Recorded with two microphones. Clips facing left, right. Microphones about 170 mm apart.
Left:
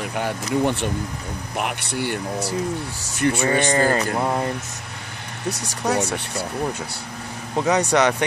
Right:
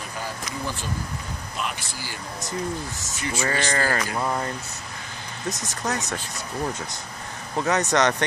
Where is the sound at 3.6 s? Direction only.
20° left (ahead or behind).